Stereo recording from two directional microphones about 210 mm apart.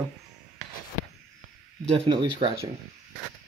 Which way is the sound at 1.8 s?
25° right (ahead or behind).